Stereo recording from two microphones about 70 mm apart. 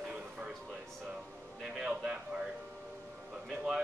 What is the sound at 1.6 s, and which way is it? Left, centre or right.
Music, centre.